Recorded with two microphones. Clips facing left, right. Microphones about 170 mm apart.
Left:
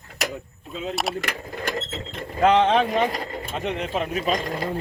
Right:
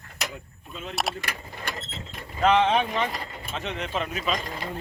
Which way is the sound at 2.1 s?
55° left (ahead or behind).